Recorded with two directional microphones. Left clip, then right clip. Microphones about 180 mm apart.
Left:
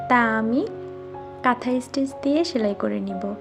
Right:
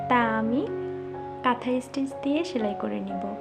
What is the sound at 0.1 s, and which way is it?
Speech, 30° left (ahead or behind).